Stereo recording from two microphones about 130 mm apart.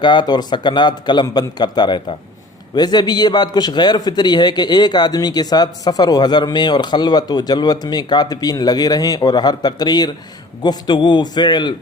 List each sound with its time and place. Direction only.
0.0 s a man's voice: 35° left (ahead or behind)